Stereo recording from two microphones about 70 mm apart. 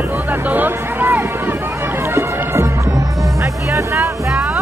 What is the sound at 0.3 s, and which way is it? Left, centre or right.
Music, right.